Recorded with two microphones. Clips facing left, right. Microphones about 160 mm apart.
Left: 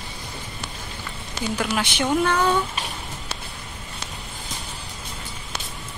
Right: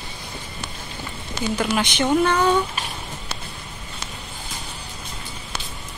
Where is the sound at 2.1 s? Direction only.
5° right (ahead or behind).